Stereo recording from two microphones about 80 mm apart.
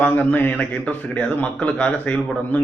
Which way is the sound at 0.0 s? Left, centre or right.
Centre.